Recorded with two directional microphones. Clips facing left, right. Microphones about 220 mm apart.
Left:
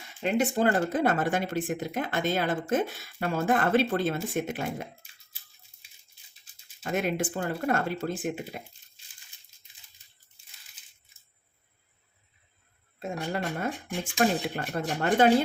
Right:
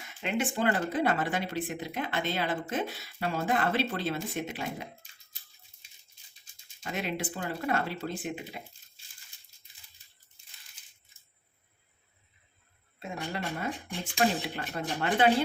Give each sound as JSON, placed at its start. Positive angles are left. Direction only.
{"t": 0.2, "sound": "speech", "side_deg": 40}
{"t": 6.8, "sound": "speech", "side_deg": 50}
{"t": 13.0, "sound": "speech", "side_deg": 50}